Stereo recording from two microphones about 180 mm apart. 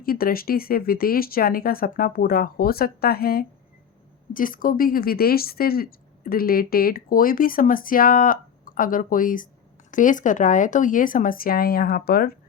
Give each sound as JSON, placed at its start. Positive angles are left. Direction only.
{"t": 0.0, "sound": "speech", "side_deg": 55}